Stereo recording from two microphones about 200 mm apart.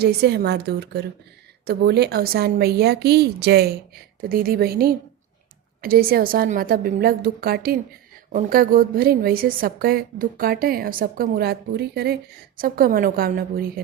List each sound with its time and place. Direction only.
0.0 s a woman's voice: 55° right (ahead or behind)